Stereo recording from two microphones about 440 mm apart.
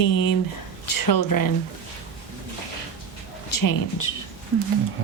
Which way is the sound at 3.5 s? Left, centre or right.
Left.